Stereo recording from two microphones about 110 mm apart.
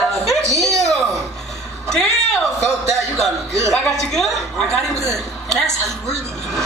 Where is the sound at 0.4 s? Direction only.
30° right (ahead or behind).